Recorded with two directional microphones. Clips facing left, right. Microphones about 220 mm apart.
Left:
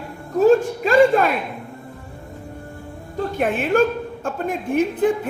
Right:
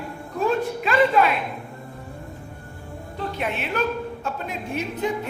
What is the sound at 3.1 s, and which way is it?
A woman's voice, 50° left (ahead or behind).